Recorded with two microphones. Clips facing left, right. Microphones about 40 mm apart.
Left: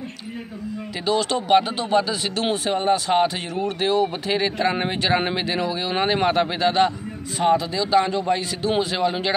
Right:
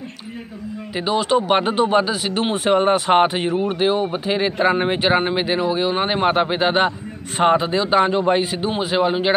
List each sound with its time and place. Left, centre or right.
1.0 s speech: centre
2.5 s a man's voice: right
3.6 s speech: right
7.3 s a man's voice: right
8.6 s speech: centre